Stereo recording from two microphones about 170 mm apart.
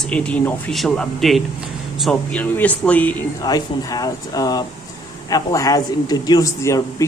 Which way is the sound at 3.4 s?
20° left (ahead or behind).